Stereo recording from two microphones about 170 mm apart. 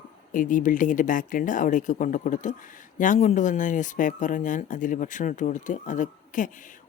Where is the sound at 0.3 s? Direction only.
50° left (ahead or behind).